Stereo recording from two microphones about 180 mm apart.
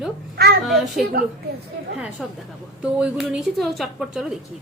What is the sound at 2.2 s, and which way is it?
A woman's voice, centre (ahead or behind).